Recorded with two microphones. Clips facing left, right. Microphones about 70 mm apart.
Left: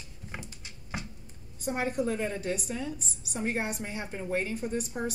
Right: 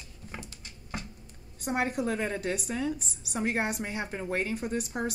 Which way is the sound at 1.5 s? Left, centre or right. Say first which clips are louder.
Even; right.